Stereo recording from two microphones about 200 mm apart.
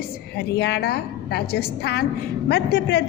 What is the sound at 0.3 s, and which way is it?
A woman's voice, 55° left (ahead or behind).